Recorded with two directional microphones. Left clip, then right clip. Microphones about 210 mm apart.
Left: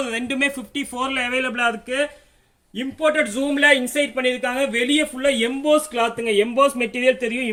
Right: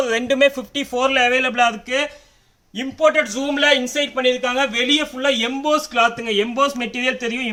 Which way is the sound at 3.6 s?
15° right (ahead or behind).